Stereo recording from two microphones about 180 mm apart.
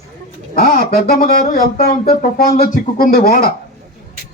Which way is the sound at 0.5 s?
55° left (ahead or behind).